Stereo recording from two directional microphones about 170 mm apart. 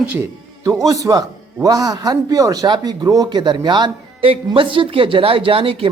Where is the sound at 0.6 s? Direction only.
20° right (ahead or behind).